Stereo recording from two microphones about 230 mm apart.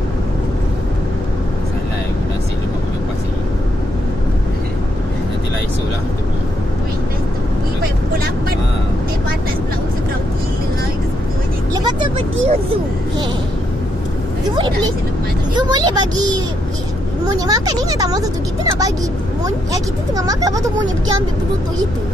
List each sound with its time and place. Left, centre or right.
11.7 s vehicle: centre
15.5 s a sound: centre
19.4 s vehicle: centre